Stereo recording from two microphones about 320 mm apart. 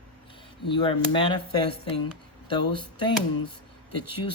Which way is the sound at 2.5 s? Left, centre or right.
Centre.